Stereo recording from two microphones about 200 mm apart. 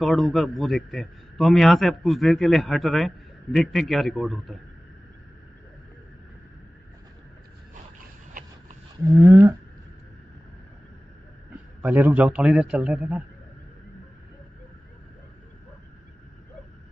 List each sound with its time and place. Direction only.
0.0 s speech: centre (ahead or behind)
9.1 s whale vocalization: 10° right (ahead or behind)
11.8 s speech: 10° right (ahead or behind)